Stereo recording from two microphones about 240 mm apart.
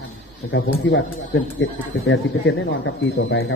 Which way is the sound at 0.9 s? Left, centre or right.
Left.